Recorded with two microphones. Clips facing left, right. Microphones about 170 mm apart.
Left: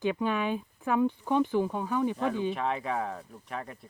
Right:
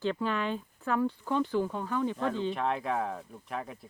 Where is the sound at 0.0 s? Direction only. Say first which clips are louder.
Left 2 dB; 15° left (ahead or behind).